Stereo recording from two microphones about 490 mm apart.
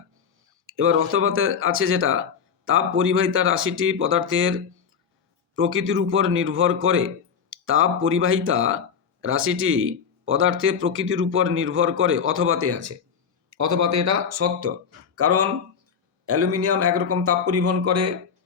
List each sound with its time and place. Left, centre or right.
0.7 s speech: right